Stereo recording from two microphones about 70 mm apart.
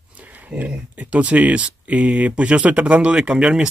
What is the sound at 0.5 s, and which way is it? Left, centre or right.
Speech, centre.